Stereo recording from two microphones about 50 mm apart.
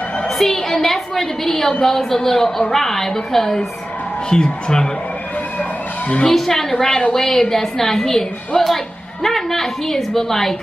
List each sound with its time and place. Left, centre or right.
0.4 s a woman's voice: centre
5.6 s vehicle: left
6.2 s a woman's voice: centre